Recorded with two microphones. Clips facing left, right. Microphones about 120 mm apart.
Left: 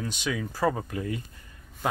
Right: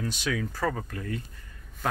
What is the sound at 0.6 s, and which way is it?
Speech, 15° left (ahead or behind).